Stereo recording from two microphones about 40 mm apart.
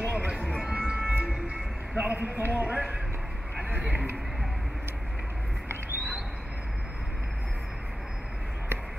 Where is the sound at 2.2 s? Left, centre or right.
Right.